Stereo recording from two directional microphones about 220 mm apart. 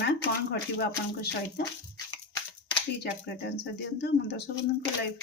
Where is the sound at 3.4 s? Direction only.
50° left (ahead or behind).